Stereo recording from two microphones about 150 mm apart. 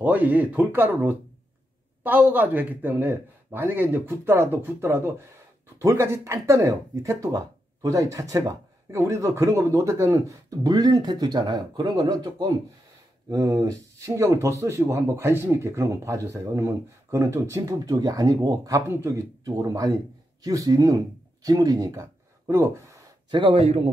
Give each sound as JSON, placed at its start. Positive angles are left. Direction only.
{"t": 0.0, "sound": "a man's voice", "side_deg": -10}
{"t": 23.3, "sound": "speech", "side_deg": -35}